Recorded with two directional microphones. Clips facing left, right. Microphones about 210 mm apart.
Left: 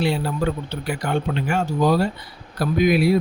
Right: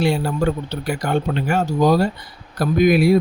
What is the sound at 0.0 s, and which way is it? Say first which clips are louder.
A man's voice: right 3 dB; 45° right (ahead or behind).